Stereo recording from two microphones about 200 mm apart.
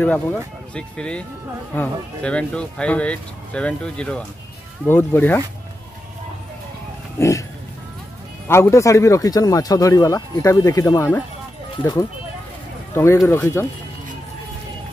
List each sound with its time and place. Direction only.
0.0 s speech: 5° left (ahead or behind)
7.2 s dog: 15° left (ahead or behind)
8.5 s speech: 15° left (ahead or behind)
12.9 s speech: 15° left (ahead or behind)